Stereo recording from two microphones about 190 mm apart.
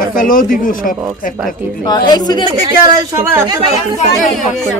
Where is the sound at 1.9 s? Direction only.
20° left (ahead or behind).